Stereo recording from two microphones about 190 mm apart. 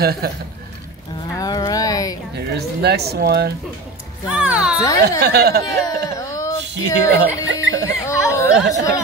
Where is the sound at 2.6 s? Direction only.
60° right (ahead or behind).